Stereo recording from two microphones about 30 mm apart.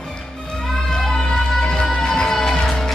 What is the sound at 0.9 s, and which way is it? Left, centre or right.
Music, centre.